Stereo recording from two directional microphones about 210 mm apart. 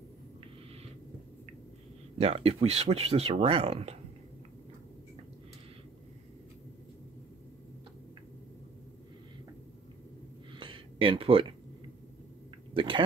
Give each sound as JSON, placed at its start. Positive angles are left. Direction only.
{"t": 2.1, "sound": "speech", "side_deg": -30}
{"t": 10.6, "sound": "a sound", "side_deg": -25}
{"t": 12.7, "sound": "speech", "side_deg": -25}